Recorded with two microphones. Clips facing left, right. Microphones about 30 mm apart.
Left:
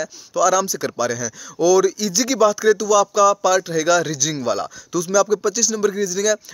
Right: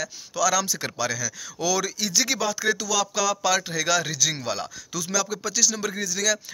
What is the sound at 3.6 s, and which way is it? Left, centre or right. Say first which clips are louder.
Speech: left 7 dB; right.